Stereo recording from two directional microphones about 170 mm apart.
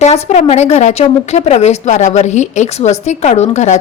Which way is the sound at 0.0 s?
40° left (ahead or behind).